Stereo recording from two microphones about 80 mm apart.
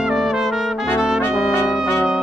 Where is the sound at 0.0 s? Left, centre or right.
Centre.